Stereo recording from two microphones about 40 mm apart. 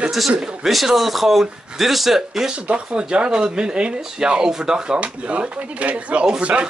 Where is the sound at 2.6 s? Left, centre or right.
Right.